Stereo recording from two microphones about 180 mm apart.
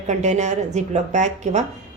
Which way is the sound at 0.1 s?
40° right (ahead or behind).